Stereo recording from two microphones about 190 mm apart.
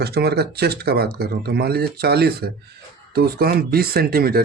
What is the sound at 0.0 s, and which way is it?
Speech, 55° right (ahead or behind).